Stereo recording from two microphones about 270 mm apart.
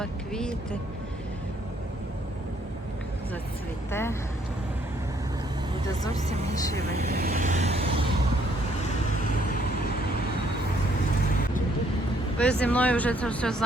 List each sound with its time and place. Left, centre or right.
0.0 s music: centre
3.9 s speech: centre
6.1 s speech: right
12.4 s speech: centre